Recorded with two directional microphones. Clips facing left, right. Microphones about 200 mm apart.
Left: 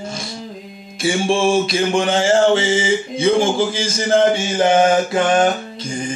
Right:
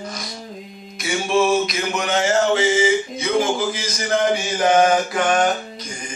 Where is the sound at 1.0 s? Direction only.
30° left (ahead or behind).